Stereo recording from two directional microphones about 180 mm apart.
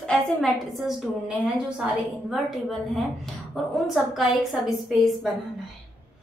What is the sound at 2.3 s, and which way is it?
A woman's voice, centre (ahead or behind).